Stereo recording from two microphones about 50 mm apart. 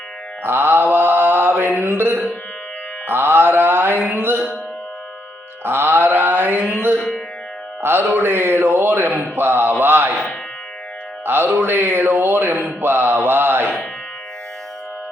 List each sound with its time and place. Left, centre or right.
0.4 s mantra: right
1.8 s speech: right
3.1 s mantra: right
5.6 s mantra: right
7.8 s music: right
8.0 s a sound: right
9.1 s speech: right
11.3 s speech: right